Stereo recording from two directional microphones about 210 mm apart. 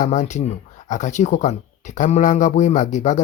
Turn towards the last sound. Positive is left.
turn(degrees=35)  # may be behind; listen again after turning